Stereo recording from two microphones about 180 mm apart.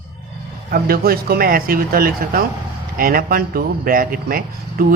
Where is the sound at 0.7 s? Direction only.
55° right (ahead or behind).